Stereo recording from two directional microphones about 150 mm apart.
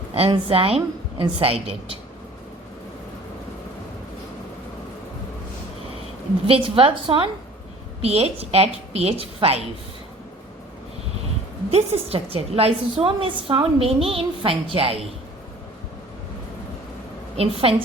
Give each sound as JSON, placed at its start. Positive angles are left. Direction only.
{"t": 0.1, "sound": "a woman's voice", "side_deg": -40}
{"t": 6.5, "sound": "a woman's voice", "side_deg": -35}
{"t": 11.7, "sound": "a woman's voice", "side_deg": -45}
{"t": 17.3, "sound": "a woman's voice", "side_deg": -40}